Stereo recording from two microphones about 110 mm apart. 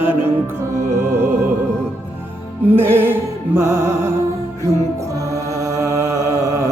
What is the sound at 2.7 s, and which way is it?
Music, 20° right (ahead or behind).